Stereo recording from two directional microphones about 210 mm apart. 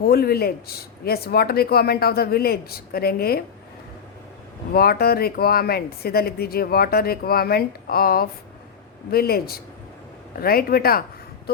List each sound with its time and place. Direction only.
0.0 s speech: 45° left (ahead or behind)
4.7 s speech: 45° left (ahead or behind)
11.5 s a sound: 50° left (ahead or behind)